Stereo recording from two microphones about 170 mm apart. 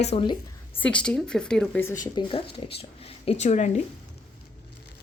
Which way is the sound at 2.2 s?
25° left (ahead or behind).